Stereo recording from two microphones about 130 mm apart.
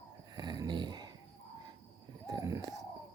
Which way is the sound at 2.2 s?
25° right (ahead or behind).